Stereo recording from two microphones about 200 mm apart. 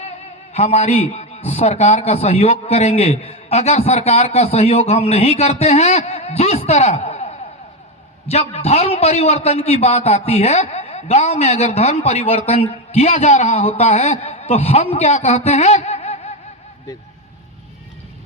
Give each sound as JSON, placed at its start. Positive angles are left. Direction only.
{"t": 0.5, "sound": "a man's voice", "side_deg": 35}
{"t": 15.4, "sound": "music", "side_deg": 35}